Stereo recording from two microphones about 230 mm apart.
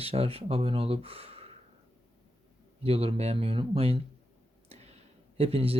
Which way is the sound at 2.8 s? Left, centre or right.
Right.